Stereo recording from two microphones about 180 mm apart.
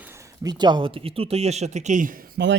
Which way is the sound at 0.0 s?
15° right (ahead or behind).